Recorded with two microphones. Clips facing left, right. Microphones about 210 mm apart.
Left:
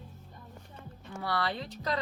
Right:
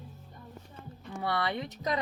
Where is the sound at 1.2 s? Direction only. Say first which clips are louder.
Right 1 dB; 20° right (ahead or behind).